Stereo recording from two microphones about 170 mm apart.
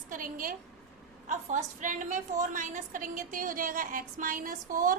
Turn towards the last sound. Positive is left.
turn(degrees=-55)  # may be behind; listen again after turning